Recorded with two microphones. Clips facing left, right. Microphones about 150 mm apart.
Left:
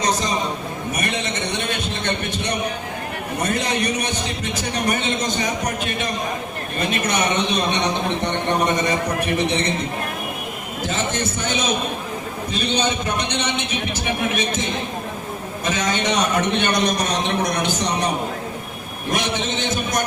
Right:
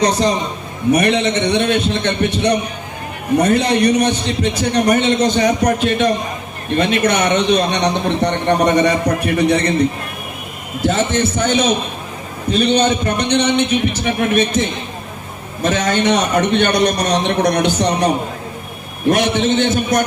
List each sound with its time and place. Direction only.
0.9 s a man's voice: 65° right (ahead or behind)
10.8 s a man's voice: 65° right (ahead or behind)
19.1 s a man's voice: 55° right (ahead or behind)